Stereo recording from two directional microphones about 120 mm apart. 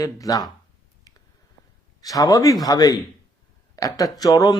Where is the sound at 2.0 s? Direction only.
30° left (ahead or behind).